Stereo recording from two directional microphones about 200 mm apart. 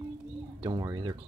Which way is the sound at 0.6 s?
20° right (ahead or behind).